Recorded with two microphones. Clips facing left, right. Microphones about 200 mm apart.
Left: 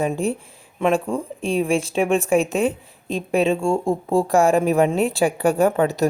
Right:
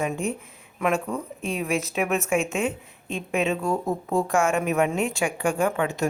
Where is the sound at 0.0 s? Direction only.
35° left (ahead or behind).